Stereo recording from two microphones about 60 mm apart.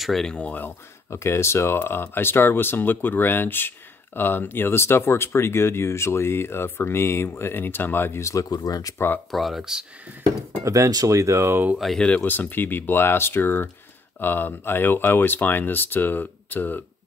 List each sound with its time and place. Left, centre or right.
0.0 s speech: centre
0.3 s speech: centre
1.1 s speech: left
8.2 s speech: left
8.5 s speech: left
8.9 s speech: left
9.3 s speech: centre
10.6 s speech: right
11.8 s speech: centre
12.3 s speech: left